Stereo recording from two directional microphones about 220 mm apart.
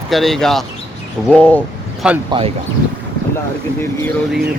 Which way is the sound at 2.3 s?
20° right (ahead or behind).